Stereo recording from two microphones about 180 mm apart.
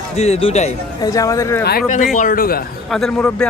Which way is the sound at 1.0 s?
20° left (ahead or behind).